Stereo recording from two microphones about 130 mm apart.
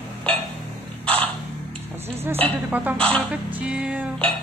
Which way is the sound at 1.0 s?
10° left (ahead or behind).